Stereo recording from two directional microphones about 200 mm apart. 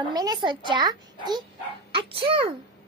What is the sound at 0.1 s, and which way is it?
A child's voice, 20° right (ahead or behind).